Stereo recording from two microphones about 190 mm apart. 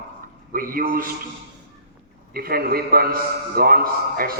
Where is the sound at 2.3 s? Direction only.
50° right (ahead or behind).